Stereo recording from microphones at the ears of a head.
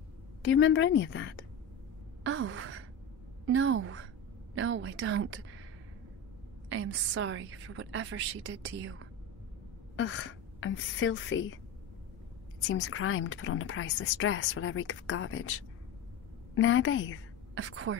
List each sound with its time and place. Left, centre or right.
0.4 s speech: left
2.2 s wail: right
3.4 s a woman's voice: right
6.7 s a woman's voice: right
9.9 s speech: left
17.6 s a woman's voice: right